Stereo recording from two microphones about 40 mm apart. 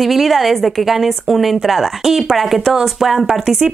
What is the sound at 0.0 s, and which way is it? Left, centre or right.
A woman's voice, centre.